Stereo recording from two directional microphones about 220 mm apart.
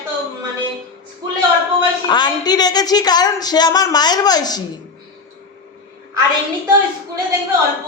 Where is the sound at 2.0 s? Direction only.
20° left (ahead or behind).